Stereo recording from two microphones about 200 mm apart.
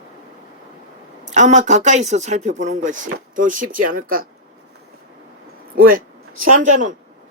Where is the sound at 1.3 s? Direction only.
35° right (ahead or behind).